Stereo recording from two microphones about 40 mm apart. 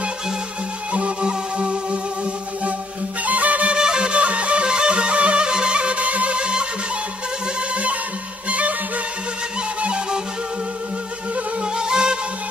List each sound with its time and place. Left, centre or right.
0.9 s music: right
3.3 s music: right
3.7 s music: right
7.7 s music: right
9.8 s music: right
11.7 s music: right